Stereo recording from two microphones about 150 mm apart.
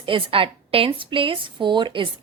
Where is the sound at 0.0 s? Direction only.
35° right (ahead or behind).